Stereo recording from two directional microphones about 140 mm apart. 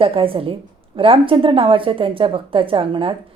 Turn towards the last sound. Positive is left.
turn(degrees=-40)  # may be behind; listen again after turning